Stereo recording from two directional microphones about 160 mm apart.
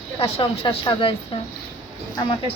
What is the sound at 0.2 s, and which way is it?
Speech, 35° left (ahead or behind).